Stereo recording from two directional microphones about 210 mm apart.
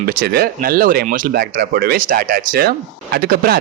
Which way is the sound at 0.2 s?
45° right (ahead or behind).